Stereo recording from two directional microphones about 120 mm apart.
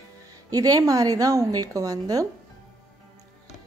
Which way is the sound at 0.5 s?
30° right (ahead or behind).